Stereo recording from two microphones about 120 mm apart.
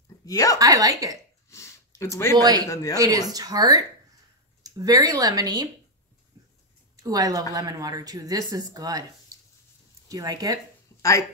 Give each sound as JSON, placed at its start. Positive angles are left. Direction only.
{"t": 0.2, "sound": "speech", "side_deg": 30}
{"t": 0.6, "sound": "speech", "side_deg": -30}
{"t": 1.5, "sound": "a sound", "side_deg": 25}
{"t": 2.3, "sound": "speech", "side_deg": -35}
{"t": 2.7, "sound": "speech", "side_deg": 25}
{"t": 3.0, "sound": "speech", "side_deg": -30}
{"t": 6.4, "sound": "a sound", "side_deg": -30}
{"t": 7.0, "sound": "speech", "side_deg": -30}
{"t": 10.0, "sound": "speech", "side_deg": -30}
{"t": 11.0, "sound": "speech", "side_deg": 25}